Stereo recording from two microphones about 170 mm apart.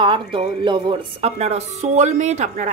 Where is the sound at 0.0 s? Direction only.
30° right (ahead or behind).